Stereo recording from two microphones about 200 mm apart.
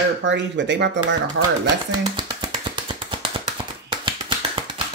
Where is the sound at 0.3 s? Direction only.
60° right (ahead or behind).